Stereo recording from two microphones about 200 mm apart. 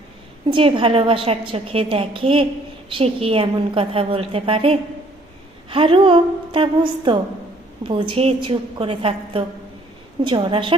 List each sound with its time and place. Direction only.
0.4 s a woman's voice: 25° right (ahead or behind)